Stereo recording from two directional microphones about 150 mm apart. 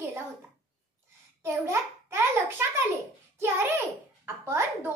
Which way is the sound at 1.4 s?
15° right (ahead or behind).